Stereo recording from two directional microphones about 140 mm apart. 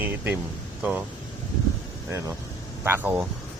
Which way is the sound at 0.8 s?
10° right (ahead or behind).